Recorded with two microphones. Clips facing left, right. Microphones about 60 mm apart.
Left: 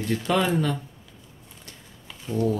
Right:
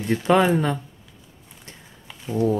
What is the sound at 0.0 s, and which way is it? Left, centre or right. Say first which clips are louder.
Speech: right 5 dB; right.